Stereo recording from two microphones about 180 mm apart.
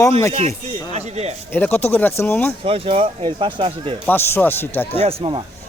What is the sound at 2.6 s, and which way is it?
Speech, 30° right (ahead or behind).